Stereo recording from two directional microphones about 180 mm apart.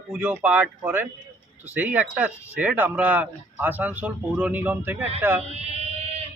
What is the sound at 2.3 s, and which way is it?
Speech, 15° left (ahead or behind).